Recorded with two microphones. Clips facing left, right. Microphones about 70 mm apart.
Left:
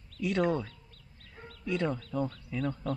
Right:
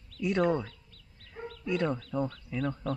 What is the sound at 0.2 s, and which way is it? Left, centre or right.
Speech, centre.